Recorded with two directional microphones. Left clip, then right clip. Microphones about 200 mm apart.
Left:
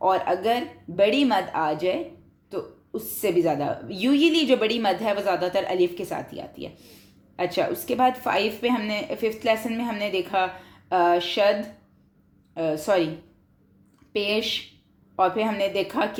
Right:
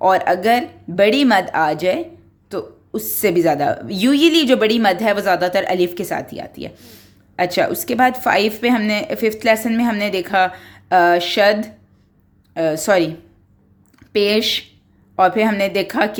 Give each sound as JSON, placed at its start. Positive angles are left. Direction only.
{"t": 0.0, "sound": "a woman's voice", "side_deg": -40}
{"t": 12.5, "sound": "a woman's voice", "side_deg": -40}
{"t": 14.1, "sound": "a woman's voice", "side_deg": -40}